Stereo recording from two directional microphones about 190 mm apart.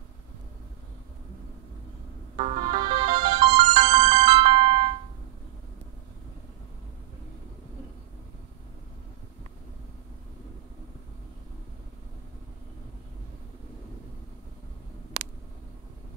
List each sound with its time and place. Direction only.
2.3 s ringtone: 30° right (ahead or behind)